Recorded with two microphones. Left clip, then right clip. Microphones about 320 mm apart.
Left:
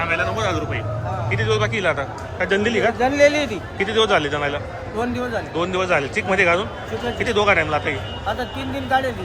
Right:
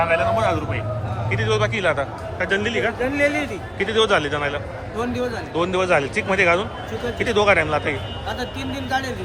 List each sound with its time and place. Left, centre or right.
0.0 s a man's voice: centre
3.0 s a man's voice: left
3.8 s a man's voice: centre